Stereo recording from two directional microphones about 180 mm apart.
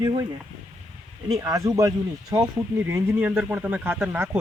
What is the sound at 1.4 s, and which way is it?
Speech, 20° right (ahead or behind).